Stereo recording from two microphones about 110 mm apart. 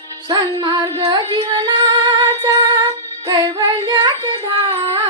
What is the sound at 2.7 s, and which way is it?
Music, 45° right (ahead or behind).